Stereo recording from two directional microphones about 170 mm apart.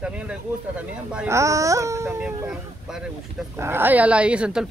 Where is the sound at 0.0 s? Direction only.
5° right (ahead or behind).